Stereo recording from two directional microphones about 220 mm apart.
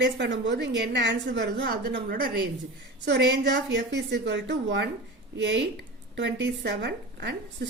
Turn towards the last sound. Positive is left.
turn(degrees=-50)  # may be behind; listen again after turning